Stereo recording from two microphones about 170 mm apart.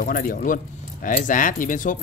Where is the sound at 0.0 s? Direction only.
55° left (ahead or behind).